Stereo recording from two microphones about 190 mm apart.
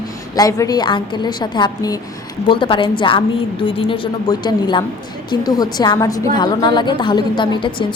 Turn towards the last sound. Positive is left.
turn(degrees=25)  # may be behind; listen again after turning